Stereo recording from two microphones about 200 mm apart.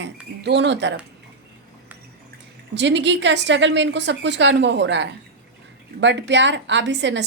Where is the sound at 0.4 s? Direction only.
60° right (ahead or behind).